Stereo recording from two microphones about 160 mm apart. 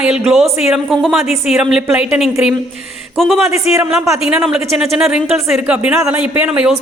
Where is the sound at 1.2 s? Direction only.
45° left (ahead or behind).